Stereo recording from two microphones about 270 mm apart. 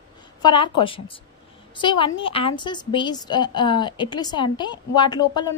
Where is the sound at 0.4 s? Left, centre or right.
Centre.